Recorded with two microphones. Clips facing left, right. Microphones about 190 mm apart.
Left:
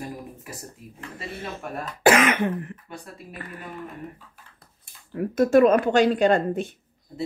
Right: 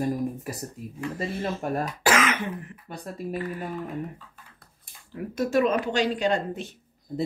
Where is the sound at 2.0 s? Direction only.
55° left (ahead or behind).